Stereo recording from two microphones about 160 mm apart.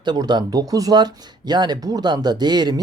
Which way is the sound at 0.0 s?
25° right (ahead or behind).